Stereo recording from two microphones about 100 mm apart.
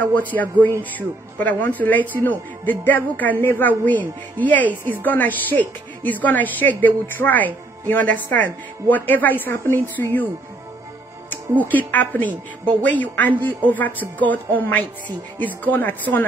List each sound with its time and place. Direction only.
0.0 s a man's voice: 15° left (ahead or behind)
11.6 s a man's voice: 15° left (ahead or behind)